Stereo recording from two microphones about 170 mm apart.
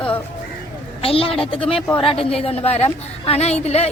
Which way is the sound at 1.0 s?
35° left (ahead or behind).